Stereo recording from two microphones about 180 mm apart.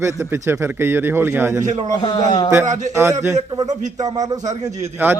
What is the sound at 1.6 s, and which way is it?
Speech, 40° right (ahead or behind).